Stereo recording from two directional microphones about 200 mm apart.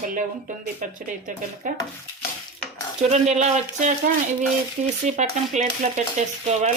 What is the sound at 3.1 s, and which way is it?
Speech, 35° right (ahead or behind).